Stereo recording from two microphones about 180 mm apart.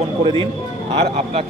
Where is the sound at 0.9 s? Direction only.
35° right (ahead or behind).